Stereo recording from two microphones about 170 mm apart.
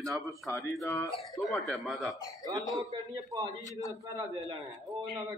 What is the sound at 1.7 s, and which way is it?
Speech, centre (ahead or behind).